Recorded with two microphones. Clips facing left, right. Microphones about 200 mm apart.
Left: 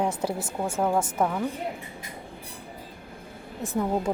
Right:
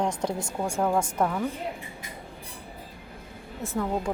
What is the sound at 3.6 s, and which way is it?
Speech, 20° left (ahead or behind).